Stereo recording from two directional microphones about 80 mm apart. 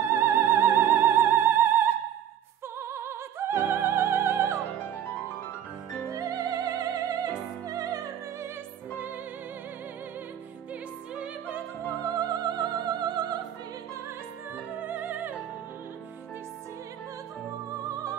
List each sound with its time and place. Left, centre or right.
0.1 s music: right
2.8 s opera: right
6.0 s music: right
11.1 s music: right
12.0 s opera: right
14.8 s music: right
17.8 s music: right